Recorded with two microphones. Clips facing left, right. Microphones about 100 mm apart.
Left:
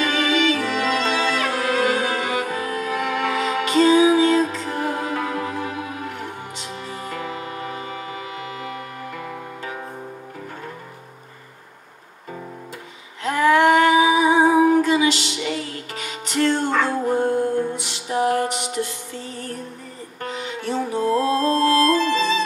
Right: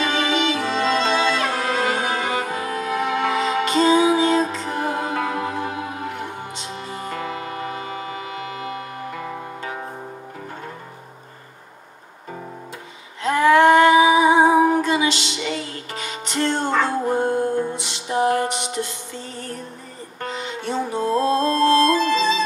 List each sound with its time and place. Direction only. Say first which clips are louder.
0.0 s music: left 1 dB; 25° right (ahead or behind)
9.1 s music: right 2 dB; 25° right (ahead or behind)
13.2 s humming: right 2 dB; 25° right (ahead or behind)
14.7 s music: left 2 dB; 25° right (ahead or behind)